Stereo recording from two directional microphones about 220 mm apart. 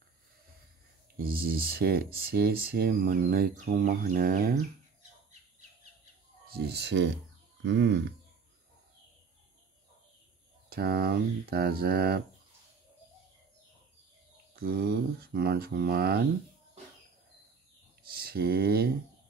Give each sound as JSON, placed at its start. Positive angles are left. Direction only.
{"t": 1.1, "sound": "speech", "side_deg": -45}
{"t": 6.5, "sound": "speech", "side_deg": -50}
{"t": 10.7, "sound": "speech", "side_deg": -45}
{"t": 14.5, "sound": "speech", "side_deg": -45}
{"t": 18.1, "sound": "speech", "side_deg": -45}